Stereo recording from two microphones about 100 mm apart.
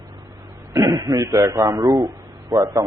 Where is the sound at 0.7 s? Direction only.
35° right (ahead or behind).